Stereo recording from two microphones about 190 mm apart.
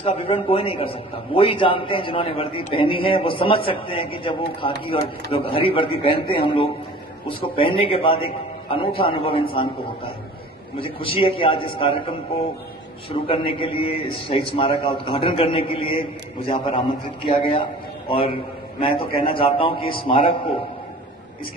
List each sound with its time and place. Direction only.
0.0 s a man's voice: 30° left (ahead or behind)